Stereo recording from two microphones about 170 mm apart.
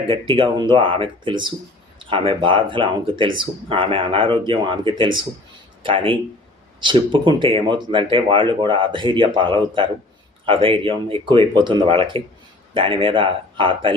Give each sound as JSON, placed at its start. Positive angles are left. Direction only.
{"t": 0.1, "sound": "speech", "side_deg": -30}